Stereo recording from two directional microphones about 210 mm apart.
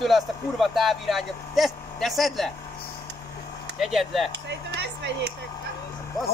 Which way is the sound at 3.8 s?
Centre (ahead or behind).